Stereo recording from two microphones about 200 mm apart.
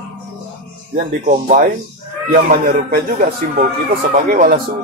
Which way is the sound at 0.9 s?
40° right (ahead or behind).